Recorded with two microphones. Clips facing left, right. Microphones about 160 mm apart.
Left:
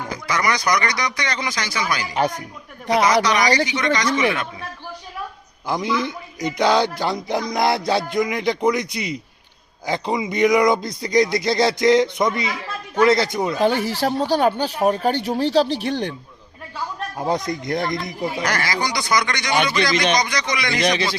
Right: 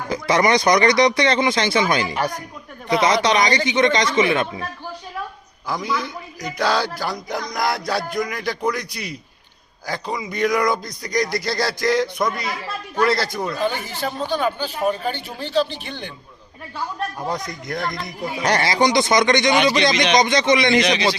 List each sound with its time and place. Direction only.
0.1 s speech: 25° right (ahead or behind)
5.6 s speech: 20° left (ahead or behind)
13.6 s speech: 70° left (ahead or behind)
17.7 s speech: 20° left (ahead or behind)
17.9 s speech: centre (ahead or behind)
18.4 s speech: 25° right (ahead or behind)